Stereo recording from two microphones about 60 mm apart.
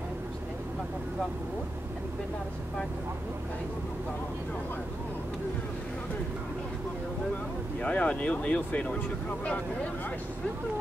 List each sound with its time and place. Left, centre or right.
7.8 s speech: left